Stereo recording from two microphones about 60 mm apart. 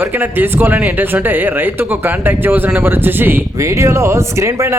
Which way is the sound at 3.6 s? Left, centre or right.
Right.